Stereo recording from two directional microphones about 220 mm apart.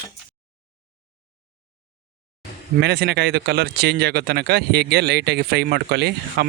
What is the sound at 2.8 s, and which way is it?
Speech, 50° right (ahead or behind).